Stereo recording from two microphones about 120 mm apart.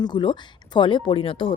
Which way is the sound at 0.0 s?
40° left (ahead or behind).